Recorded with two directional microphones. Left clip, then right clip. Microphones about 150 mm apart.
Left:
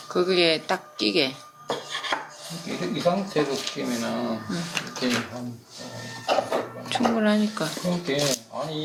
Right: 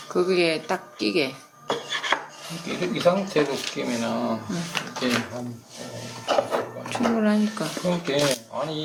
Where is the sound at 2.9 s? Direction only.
15° right (ahead or behind).